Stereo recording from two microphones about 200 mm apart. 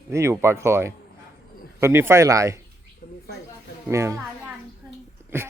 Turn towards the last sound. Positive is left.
turn(degrees=-10)  # may be behind; listen again after turning